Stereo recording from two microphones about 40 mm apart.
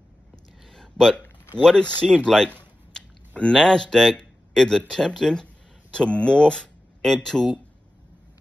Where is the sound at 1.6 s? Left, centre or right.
Left.